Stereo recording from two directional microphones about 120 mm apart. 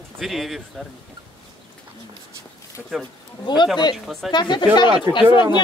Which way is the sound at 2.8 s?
Centre (ahead or behind).